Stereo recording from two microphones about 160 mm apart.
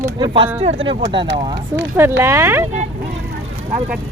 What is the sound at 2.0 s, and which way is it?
Speech, 15° right (ahead or behind).